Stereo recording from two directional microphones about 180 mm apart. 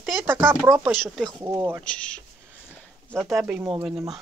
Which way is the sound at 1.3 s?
20° right (ahead or behind).